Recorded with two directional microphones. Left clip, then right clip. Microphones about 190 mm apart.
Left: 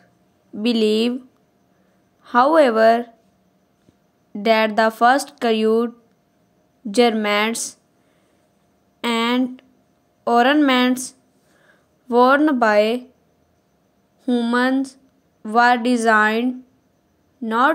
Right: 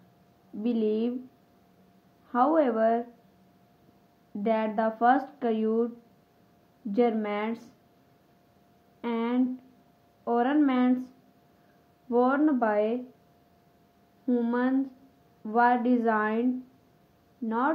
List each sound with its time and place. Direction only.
0.6 s speech: 60° left (ahead or behind)
2.2 s speech: 60° left (ahead or behind)
4.4 s speech: 55° left (ahead or behind)
6.9 s speech: 60° left (ahead or behind)
9.0 s a sound: 60° left (ahead or behind)
10.2 s speech: 60° left (ahead or behind)
12.1 s speech: 60° left (ahead or behind)
14.2 s a woman's voice: 50° left (ahead or behind)
17.5 s speech: 55° left (ahead or behind)